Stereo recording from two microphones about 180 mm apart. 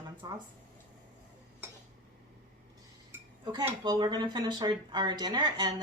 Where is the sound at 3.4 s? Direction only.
25° right (ahead or behind).